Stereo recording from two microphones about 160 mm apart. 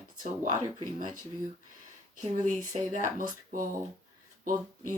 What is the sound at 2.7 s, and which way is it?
Speech, 55° right (ahead or behind).